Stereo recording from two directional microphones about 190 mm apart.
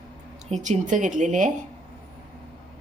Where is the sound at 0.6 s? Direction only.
40° right (ahead or behind).